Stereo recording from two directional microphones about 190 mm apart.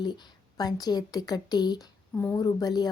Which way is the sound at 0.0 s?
25° left (ahead or behind).